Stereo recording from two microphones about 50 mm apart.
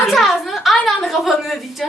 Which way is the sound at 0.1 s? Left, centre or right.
Centre.